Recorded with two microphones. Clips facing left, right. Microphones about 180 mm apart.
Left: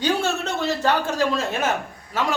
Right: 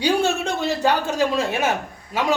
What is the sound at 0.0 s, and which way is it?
A man's voice, 15° right (ahead or behind).